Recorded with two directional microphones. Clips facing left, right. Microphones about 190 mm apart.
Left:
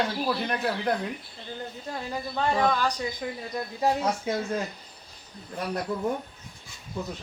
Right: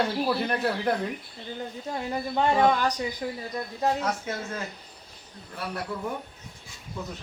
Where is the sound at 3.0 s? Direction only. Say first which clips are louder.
Right 1 dB; 10° right (ahead or behind).